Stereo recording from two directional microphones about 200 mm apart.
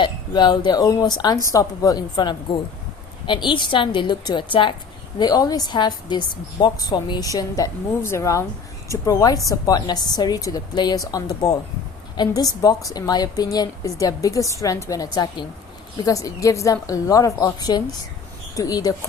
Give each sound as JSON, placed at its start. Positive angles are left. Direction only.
{"t": 0.0, "sound": "a woman's voice", "side_deg": 20}